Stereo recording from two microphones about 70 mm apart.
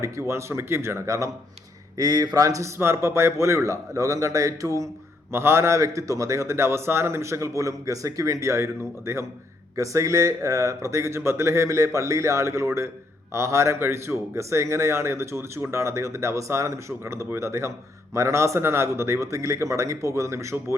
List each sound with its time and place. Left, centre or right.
0.0 s speech: right
2.0 s speech: right
5.3 s speech: right